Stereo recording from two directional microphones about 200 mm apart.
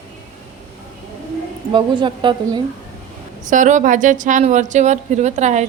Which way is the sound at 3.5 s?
40° right (ahead or behind).